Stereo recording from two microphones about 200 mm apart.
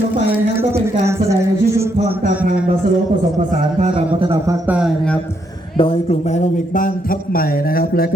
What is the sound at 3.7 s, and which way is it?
Speech, 30° right (ahead or behind).